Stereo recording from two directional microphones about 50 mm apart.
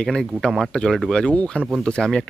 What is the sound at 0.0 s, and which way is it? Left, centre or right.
Speech, centre.